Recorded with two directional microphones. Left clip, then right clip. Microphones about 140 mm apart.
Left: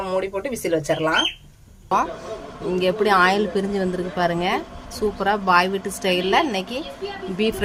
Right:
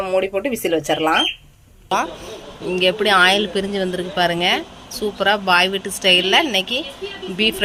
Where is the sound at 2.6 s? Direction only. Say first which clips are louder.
Right 3 dB; 5° left (ahead or behind).